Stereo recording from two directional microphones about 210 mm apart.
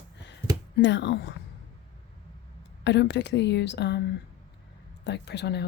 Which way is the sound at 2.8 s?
55° left (ahead or behind).